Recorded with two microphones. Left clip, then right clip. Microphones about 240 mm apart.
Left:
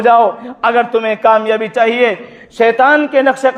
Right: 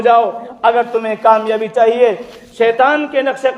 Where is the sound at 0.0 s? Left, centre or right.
Left.